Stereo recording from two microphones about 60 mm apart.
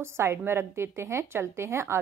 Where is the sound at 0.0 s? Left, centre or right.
Right.